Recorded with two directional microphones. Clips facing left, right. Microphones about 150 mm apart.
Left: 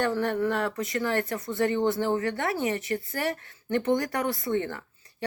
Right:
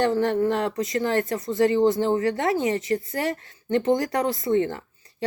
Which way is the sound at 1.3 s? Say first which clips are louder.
Right 5 dB; 20° right (ahead or behind).